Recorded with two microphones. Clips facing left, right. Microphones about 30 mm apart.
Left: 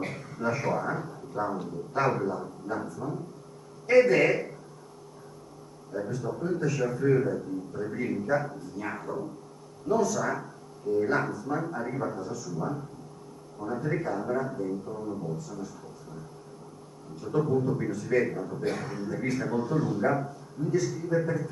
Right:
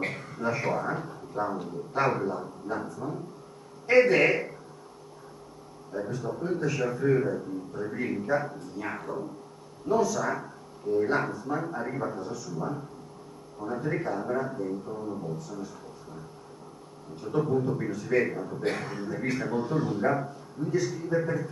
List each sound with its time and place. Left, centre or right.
0.0 s a sound: right
0.4 s a man's voice: centre
5.9 s a man's voice: centre
12.5 s a man's voice: centre
17.2 s a man's voice: centre
18.8 s a man's voice: right